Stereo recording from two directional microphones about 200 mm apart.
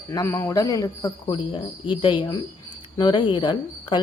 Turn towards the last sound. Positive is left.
turn(degrees=20)  # may be behind; listen again after turning